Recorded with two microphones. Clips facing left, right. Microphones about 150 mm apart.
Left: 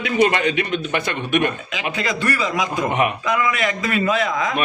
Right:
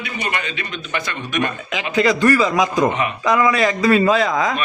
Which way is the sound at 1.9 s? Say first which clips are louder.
Right 9 dB; 40° right (ahead or behind).